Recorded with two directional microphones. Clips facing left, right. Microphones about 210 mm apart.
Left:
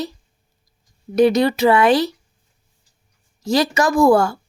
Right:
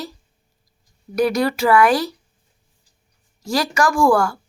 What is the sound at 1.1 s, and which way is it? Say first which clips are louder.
Speech: left 4 dB; 20° left (ahead or behind).